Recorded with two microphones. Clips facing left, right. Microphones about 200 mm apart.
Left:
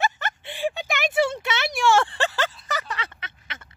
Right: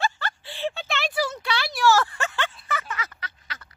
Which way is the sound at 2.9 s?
25° left (ahead or behind).